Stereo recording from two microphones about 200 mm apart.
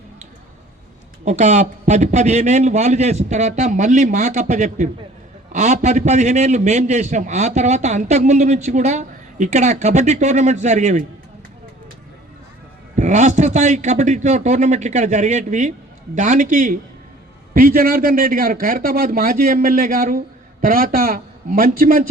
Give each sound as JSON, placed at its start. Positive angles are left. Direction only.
{"t": 1.2, "sound": "a man's voice", "side_deg": -35}
{"t": 13.0, "sound": "a man's voice", "side_deg": -35}